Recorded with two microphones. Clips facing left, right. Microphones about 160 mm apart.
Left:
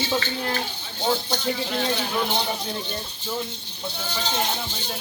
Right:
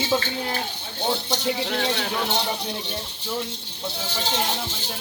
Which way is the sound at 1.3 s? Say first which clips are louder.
Right 1 dB; 75° right (ahead or behind).